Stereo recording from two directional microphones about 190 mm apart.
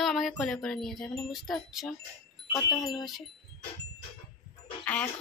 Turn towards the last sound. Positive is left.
turn(degrees=5)  # may be behind; listen again after turning